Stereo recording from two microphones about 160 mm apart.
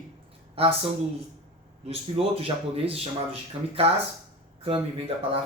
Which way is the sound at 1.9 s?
35° right (ahead or behind).